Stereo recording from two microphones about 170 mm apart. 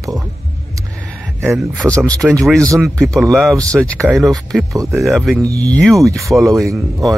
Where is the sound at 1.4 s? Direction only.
15° right (ahead or behind).